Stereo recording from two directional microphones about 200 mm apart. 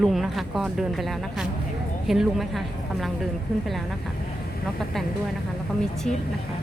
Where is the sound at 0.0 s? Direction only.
Centre (ahead or behind).